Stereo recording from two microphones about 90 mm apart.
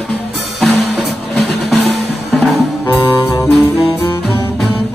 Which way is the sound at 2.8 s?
40° left (ahead or behind).